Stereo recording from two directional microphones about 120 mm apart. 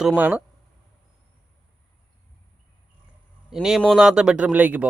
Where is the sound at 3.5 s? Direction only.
5° right (ahead or behind).